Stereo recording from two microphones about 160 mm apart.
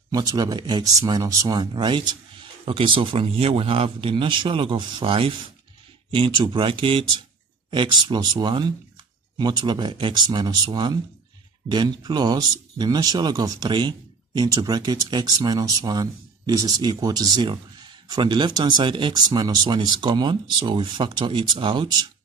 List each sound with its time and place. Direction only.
0.1 s speech: 25° right (ahead or behind)